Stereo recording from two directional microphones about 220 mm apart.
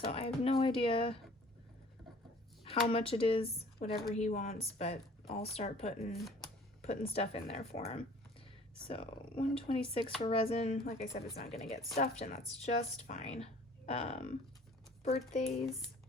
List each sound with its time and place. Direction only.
0.0 s a woman's voice: 25° left (ahead or behind)
2.6 s a woman's voice: 25° left (ahead or behind)